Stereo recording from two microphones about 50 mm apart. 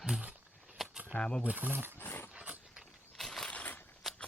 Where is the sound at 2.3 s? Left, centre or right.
Right.